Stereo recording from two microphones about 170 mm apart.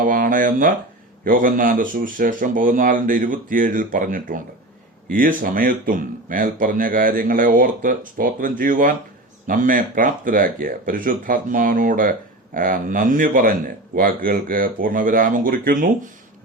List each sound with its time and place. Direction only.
0.0 s speech: 50° right (ahead or behind)